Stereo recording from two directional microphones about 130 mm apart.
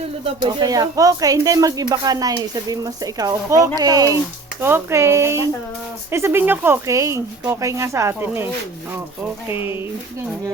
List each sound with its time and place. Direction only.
0.6 s speech: 30° right (ahead or behind)
9.5 s speech: 20° right (ahead or behind)